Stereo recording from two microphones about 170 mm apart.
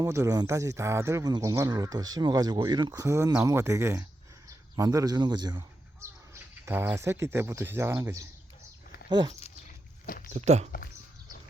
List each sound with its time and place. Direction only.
0.0 s speech: 20° right (ahead or behind)
10.3 s speech: 40° right (ahead or behind)